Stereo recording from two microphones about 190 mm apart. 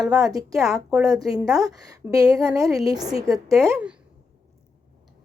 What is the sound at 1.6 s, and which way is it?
A woman's voice, 20° right (ahead or behind).